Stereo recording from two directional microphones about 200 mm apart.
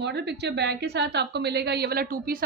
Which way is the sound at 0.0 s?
60° right (ahead or behind).